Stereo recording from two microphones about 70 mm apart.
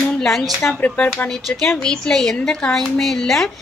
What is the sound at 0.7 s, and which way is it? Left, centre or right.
A woman's voice, centre.